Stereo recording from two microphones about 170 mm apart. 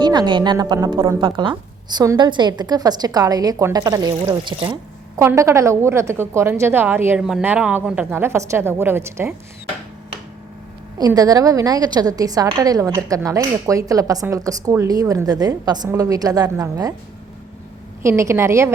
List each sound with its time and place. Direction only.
0.0 s a woman's voice: 25° right (ahead or behind)
10.9 s a woman's voice: 20° right (ahead or behind)
18.0 s a woman's voice: 15° right (ahead or behind)